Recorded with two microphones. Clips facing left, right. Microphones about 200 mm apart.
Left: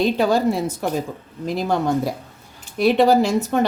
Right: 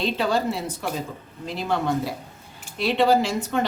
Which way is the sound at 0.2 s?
45° left (ahead or behind).